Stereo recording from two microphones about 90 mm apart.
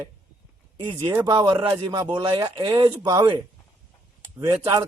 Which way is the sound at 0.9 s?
30° right (ahead or behind).